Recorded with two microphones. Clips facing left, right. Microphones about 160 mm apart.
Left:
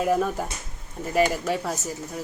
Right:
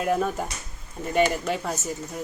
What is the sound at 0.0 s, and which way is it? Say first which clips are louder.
Speech: left 1 dB; centre (ahead or behind).